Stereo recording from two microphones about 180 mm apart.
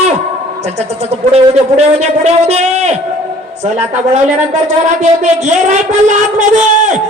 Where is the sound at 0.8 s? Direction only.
35° right (ahead or behind).